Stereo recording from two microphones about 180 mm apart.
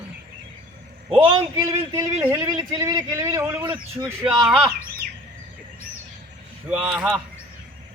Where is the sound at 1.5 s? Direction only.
15° right (ahead or behind).